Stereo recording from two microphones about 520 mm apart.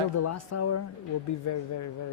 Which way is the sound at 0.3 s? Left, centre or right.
Left.